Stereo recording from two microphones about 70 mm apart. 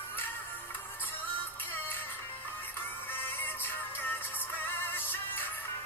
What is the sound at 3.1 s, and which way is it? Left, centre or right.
Music, left.